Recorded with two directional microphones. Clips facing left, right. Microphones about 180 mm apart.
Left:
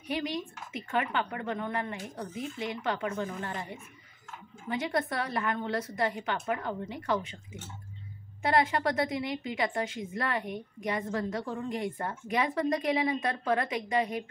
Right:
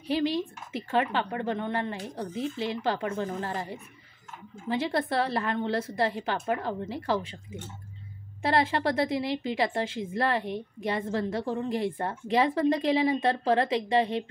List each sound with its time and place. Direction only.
0.1 s a woman's voice: 30° right (ahead or behind)
8.4 s a woman's voice: 30° right (ahead or behind)